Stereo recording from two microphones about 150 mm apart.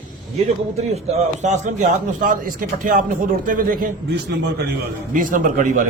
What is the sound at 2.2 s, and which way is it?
Speech, 65° right (ahead or behind).